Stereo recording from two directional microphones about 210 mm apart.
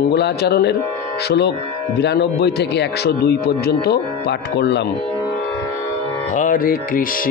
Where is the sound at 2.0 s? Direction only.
55° left (ahead or behind).